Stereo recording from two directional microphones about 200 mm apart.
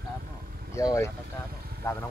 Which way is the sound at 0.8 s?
15° left (ahead or behind).